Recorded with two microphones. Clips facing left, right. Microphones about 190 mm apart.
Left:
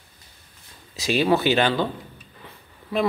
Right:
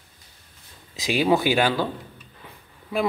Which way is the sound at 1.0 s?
15° right (ahead or behind).